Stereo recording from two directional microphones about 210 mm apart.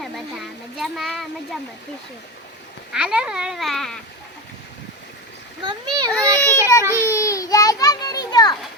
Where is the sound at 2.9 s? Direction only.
5° right (ahead or behind).